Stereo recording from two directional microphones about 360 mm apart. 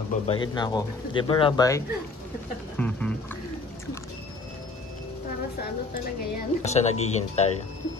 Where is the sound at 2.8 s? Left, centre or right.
Centre.